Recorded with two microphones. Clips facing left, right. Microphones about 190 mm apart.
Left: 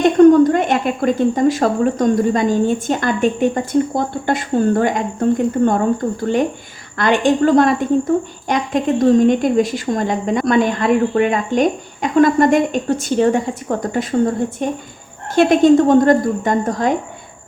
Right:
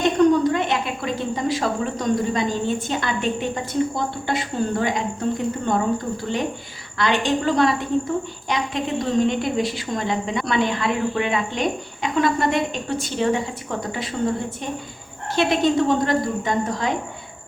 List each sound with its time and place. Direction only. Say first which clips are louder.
0.2 s a woman's voice: left 9 dB; 50° left (ahead or behind)
6.9 s a woman's voice: left 6 dB; 50° left (ahead or behind)